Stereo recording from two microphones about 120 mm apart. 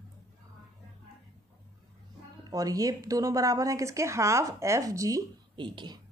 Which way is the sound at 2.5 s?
30° right (ahead or behind).